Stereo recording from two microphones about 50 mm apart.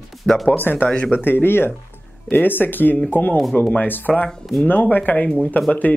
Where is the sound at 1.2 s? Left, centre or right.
Left.